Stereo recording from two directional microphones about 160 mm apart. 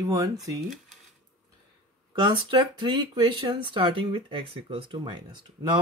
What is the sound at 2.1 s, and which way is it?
Speech, 30° right (ahead or behind).